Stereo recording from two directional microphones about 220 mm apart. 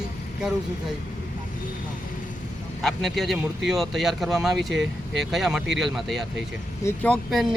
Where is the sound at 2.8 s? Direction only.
Centre (ahead or behind).